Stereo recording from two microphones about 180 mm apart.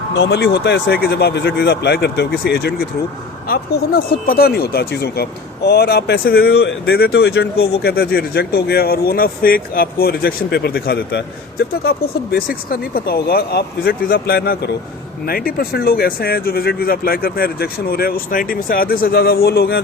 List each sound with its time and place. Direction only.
0.2 s speech: 65° left (ahead or behind)